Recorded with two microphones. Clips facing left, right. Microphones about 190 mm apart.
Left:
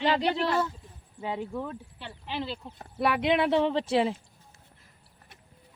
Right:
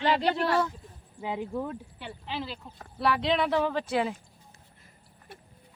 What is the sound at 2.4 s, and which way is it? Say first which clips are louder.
Speech: left 3 dB; 25° left (ahead or behind).